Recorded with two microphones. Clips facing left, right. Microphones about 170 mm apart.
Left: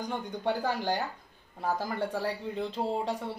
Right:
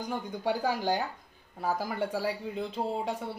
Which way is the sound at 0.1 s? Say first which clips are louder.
Right 1 dB; 10° right (ahead or behind).